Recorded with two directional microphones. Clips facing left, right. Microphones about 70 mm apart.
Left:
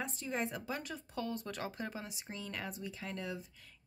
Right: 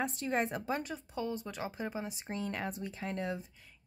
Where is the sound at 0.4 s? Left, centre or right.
Right.